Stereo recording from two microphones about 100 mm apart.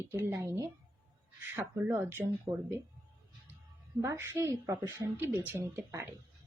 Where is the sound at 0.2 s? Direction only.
30° right (ahead or behind).